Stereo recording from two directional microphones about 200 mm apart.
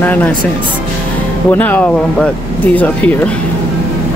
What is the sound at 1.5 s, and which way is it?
Speech, 10° left (ahead or behind).